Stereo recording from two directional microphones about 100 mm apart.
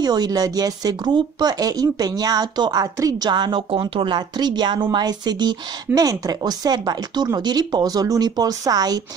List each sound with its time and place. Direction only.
0.0 s speech: 40° right (ahead or behind)